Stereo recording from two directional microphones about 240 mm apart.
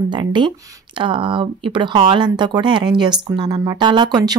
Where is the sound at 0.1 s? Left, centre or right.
Centre.